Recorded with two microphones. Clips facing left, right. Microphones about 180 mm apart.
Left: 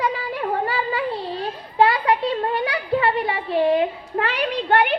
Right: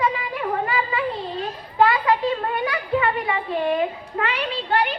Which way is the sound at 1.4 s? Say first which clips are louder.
Left 1 dB; 30° left (ahead or behind).